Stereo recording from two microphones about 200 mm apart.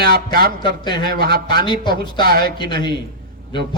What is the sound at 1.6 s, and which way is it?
Speech, 20° left (ahead or behind).